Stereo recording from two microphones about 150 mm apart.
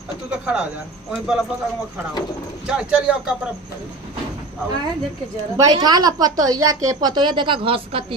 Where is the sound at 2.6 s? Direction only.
5° right (ahead or behind).